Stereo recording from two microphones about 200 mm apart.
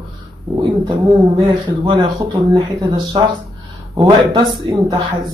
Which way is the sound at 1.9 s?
20° right (ahead or behind).